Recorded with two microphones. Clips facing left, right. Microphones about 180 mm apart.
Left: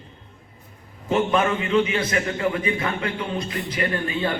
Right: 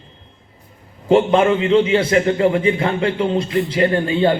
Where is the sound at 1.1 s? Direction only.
30° right (ahead or behind).